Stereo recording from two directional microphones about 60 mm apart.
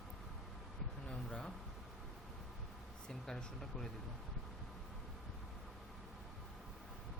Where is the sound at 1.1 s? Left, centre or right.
Centre.